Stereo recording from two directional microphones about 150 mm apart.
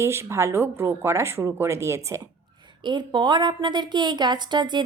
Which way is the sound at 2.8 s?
30° right (ahead or behind).